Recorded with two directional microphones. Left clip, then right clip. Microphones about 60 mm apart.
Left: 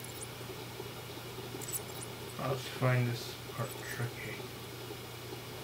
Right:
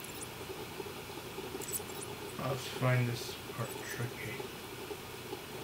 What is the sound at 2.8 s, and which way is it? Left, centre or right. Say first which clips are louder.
Speech: even; right.